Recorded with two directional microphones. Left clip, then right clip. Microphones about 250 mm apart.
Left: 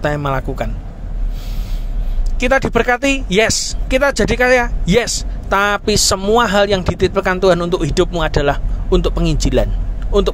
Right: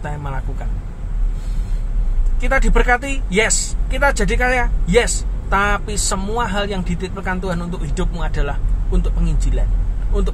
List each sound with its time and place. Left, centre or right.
0.0 s speech: left
2.4 s speech: left